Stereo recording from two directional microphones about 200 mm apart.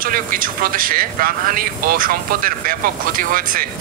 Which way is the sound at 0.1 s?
45° right (ahead or behind).